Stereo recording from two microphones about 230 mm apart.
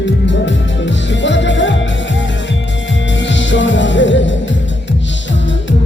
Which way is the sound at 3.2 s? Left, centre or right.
Left.